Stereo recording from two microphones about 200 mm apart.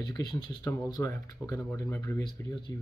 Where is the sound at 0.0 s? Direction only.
20° left (ahead or behind).